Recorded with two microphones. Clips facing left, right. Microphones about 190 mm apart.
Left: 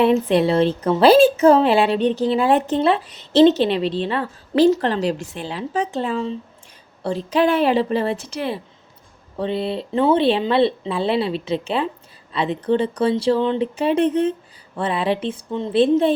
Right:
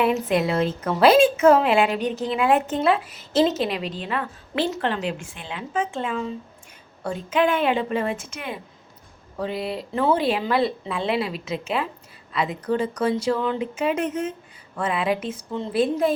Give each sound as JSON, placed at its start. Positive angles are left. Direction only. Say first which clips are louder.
{"t": 0.0, "sound": "a woman's voice", "louder": "left 5 dB", "side_deg": 30}